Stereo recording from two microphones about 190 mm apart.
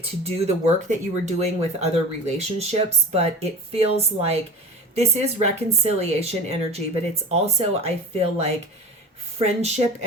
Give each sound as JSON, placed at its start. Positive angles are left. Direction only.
{"t": 0.0, "sound": "speech", "side_deg": -30}